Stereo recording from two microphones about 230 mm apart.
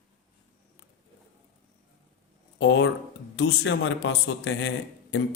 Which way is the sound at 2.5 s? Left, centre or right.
Left.